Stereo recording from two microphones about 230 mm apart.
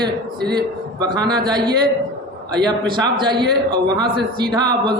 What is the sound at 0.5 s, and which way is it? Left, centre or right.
A man's voice, centre.